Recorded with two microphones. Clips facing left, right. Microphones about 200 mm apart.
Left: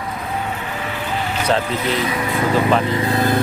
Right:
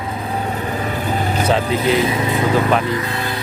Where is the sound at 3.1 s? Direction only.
40° left (ahead or behind).